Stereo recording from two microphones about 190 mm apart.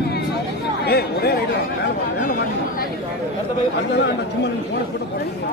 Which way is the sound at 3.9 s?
65° left (ahead or behind).